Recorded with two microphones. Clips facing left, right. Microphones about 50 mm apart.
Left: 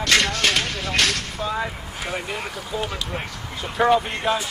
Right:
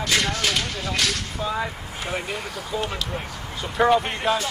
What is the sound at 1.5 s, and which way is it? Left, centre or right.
Speech, centre.